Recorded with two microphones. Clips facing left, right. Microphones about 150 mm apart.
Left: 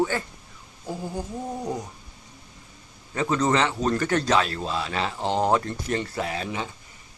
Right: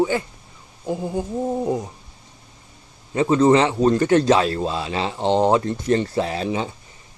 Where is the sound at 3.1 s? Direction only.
25° right (ahead or behind).